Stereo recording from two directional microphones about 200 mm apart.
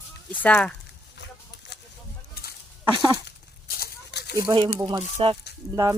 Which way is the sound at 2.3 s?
50° left (ahead or behind).